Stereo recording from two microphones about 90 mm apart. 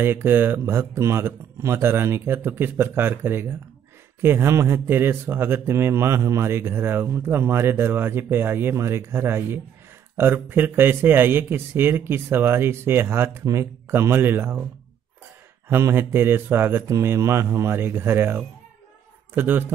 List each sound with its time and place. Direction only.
0.0 s speech: 25° right (ahead or behind)
15.7 s speech: 25° right (ahead or behind)